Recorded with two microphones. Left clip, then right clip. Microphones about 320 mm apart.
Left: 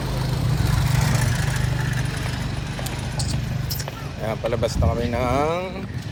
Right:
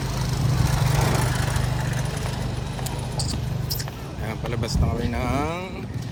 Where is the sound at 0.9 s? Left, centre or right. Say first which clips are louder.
Right 2 dB; centre.